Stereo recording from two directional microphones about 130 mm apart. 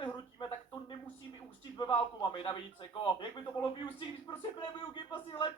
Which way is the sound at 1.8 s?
40° left (ahead or behind).